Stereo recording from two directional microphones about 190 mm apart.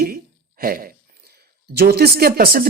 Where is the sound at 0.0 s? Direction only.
50° right (ahead or behind).